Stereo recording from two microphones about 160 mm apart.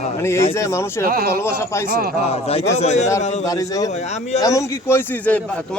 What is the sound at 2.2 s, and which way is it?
Speech, 40° left (ahead or behind).